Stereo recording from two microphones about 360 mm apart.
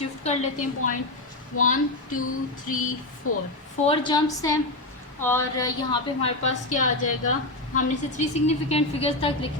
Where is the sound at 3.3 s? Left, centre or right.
Left.